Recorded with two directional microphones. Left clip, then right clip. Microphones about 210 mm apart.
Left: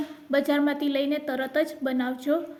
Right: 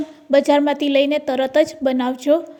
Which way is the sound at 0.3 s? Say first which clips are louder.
Right 9 dB; 30° right (ahead or behind).